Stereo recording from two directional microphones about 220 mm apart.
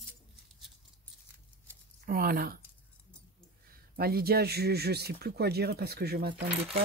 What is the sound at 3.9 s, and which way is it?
Speech, 45° right (ahead or behind).